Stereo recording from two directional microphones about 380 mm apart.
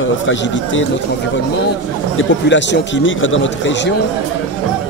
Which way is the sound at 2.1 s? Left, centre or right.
Left.